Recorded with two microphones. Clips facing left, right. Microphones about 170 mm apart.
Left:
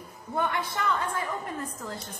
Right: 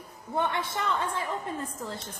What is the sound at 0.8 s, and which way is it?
Speech, 25° right (ahead or behind).